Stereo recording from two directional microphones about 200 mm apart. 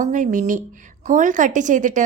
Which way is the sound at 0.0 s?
40° right (ahead or behind).